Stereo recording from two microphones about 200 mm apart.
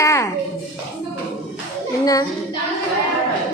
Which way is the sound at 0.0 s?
15° left (ahead or behind).